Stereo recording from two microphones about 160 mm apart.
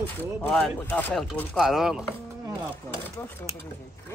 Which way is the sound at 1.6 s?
Centre (ahead or behind).